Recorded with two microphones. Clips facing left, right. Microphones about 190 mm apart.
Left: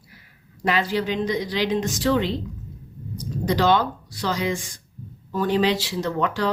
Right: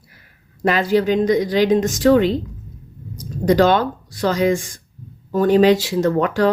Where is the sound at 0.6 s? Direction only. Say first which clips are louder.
Right 6 dB; 45° right (ahead or behind).